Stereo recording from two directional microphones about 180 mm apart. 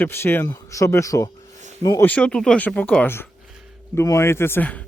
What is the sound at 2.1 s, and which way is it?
Speech, 5° left (ahead or behind).